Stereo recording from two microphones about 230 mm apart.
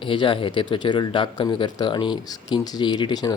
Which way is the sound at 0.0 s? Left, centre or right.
Left.